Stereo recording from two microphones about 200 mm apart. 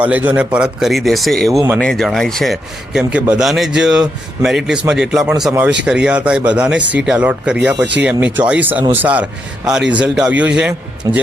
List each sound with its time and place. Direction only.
0.0 s speech: 10° right (ahead or behind)
1.5 s speech: 15° right (ahead or behind)
1.8 s speech: centre (ahead or behind)
11.1 s speech: 20° right (ahead or behind)